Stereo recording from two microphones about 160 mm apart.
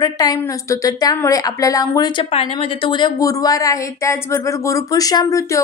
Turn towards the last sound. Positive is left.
turn(degrees=20)  # may be behind; listen again after turning